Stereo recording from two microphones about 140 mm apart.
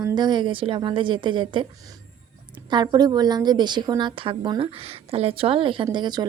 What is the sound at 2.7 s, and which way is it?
A woman's voice, 30° right (ahead or behind).